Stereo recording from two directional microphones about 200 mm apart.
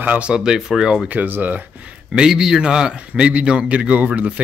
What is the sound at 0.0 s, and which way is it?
Speech, 5° right (ahead or behind).